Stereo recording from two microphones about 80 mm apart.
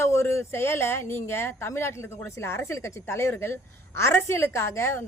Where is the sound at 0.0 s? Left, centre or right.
Left.